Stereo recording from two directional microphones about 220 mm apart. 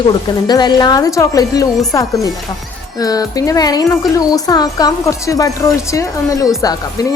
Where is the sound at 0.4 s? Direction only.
20° left (ahead or behind).